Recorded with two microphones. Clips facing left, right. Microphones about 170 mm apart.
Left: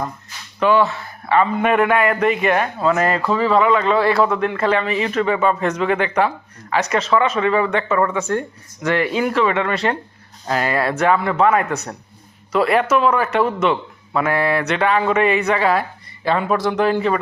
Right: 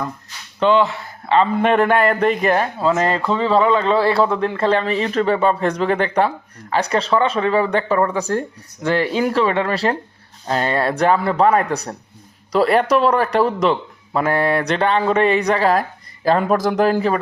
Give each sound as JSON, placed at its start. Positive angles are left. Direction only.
{"t": 0.6, "sound": "speech", "side_deg": -20}
{"t": 2.8, "sound": "speech", "side_deg": -25}